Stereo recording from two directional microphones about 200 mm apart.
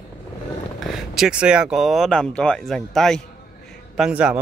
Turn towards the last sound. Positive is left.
turn(degrees=-5)  # may be behind; listen again after turning